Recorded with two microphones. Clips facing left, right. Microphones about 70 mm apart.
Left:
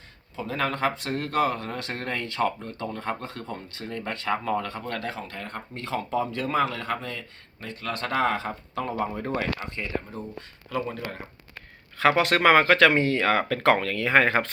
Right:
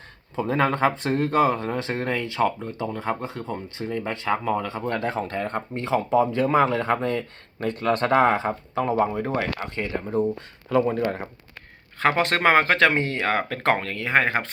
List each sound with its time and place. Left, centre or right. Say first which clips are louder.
0.3 s speech: right 6 dB; right
5.1 s speech: right 9 dB; right; by 9.5 s centre
9.6 s speech: right 3 dB; right
11.9 s speech: even; right